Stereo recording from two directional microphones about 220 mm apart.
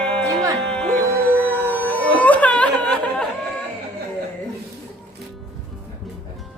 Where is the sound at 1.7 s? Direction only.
10° left (ahead or behind).